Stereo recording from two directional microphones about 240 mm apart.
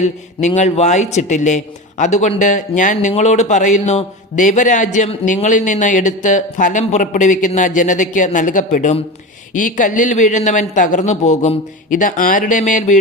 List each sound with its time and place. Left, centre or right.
0.0 s speech: left